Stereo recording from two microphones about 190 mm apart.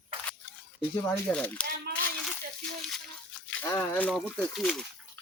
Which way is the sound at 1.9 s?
60° right (ahead or behind).